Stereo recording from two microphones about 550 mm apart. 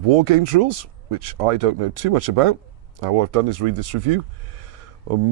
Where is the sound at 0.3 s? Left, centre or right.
Right.